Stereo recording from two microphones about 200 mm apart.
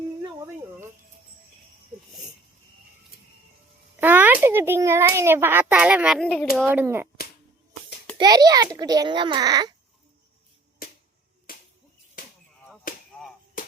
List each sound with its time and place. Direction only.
0.2 s a sound: 15° right (ahead or behind)
3.9 s a child's voice: 10° right (ahead or behind)
6.7 s a child's voice: 10° right (ahead or behind)
8.2 s a child's voice: 20° right (ahead or behind)
11.5 s finger snapping: 45° left (ahead or behind)
12.2 s chop: 45° left (ahead or behind)
12.9 s a sound: 45° left (ahead or behind)
13.6 s music: 40° left (ahead or behind)